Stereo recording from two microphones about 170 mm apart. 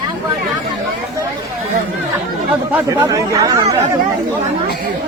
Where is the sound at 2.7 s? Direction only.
10° right (ahead or behind).